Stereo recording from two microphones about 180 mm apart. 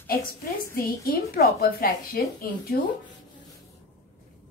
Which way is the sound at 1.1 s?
60° left (ahead or behind).